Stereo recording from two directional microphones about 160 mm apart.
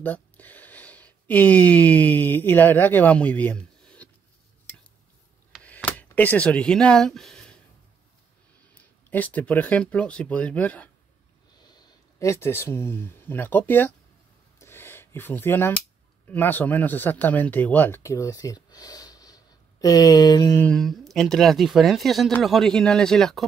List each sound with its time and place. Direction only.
0.0 s speech: 10° left (ahead or behind)
5.5 s a sound: 5° right (ahead or behind)
5.9 s speech: 10° left (ahead or behind)
8.7 s speech: 10° left (ahead or behind)
11.6 s speech: 25° left (ahead or behind)
14.6 s a sound: 15° left (ahead or behind)
16.3 s speech: 10° left (ahead or behind)
20.6 s speech: 5° left (ahead or behind)